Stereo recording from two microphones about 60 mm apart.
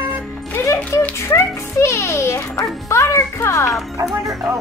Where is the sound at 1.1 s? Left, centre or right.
Left.